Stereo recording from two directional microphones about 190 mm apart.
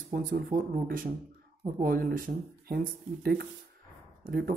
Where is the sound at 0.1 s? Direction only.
45° right (ahead or behind).